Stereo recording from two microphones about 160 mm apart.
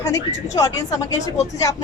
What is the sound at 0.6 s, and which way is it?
Speech, 20° left (ahead or behind).